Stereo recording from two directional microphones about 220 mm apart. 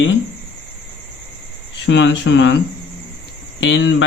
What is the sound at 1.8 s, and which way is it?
Speech, 55° left (ahead or behind).